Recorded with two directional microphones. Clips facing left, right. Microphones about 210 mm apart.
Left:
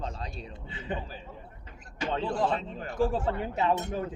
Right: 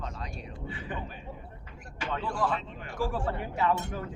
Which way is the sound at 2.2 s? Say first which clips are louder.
Left 2 dB; 25° left (ahead or behind).